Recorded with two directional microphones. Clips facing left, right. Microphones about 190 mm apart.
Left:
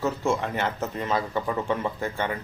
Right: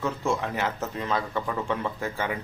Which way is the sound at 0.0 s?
Centre (ahead or behind).